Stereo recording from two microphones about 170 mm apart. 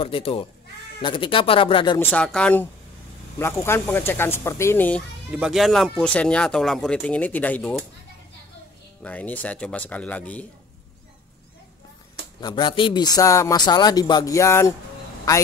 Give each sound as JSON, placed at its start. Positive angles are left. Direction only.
{"t": 0.0, "sound": "speech", "side_deg": 30}
{"t": 2.0, "sound": "speech", "side_deg": 10}
{"t": 5.3, "sound": "speech", "side_deg": -5}
{"t": 9.0, "sound": "speech", "side_deg": 10}
{"t": 12.4, "sound": "speech", "side_deg": 25}